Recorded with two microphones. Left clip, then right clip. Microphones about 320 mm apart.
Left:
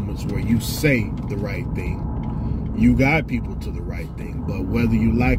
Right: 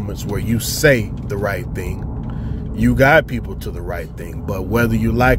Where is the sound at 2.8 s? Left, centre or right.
Right.